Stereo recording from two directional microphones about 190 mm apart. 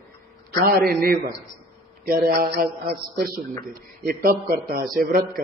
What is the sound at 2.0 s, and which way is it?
A man's voice, 50° right (ahead or behind).